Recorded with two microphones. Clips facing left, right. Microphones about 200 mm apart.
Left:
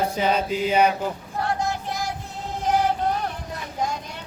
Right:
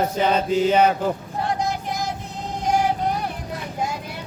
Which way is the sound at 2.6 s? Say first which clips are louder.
Right 1 dB; 15° right (ahead or behind).